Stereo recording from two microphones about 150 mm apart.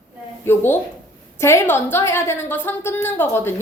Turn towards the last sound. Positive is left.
turn(degrees=15)  # may be behind; listen again after turning